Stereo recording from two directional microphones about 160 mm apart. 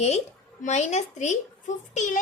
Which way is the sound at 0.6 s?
45° left (ahead or behind).